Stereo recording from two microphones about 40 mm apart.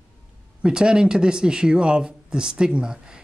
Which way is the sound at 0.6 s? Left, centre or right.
Right.